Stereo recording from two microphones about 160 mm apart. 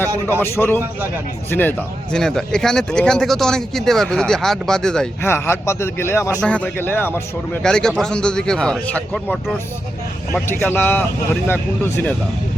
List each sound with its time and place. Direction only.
0.1 s a man's voice: 15° right (ahead or behind)
0.5 s a man's voice: 10° left (ahead or behind)
5.2 s a man's voice: 15° left (ahead or behind)
10.5 s a man's voice: 10° left (ahead or behind)